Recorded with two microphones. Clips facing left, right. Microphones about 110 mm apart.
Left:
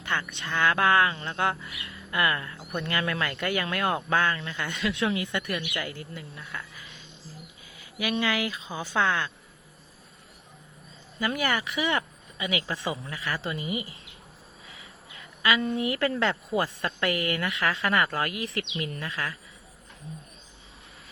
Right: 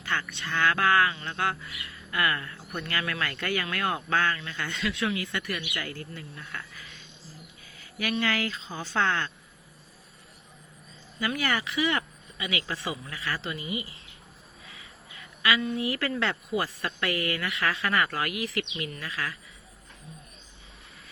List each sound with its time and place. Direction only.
0.0 s speech: 20° left (ahead or behind)
11.3 s speech: 15° left (ahead or behind)
15.6 s speech: 30° left (ahead or behind)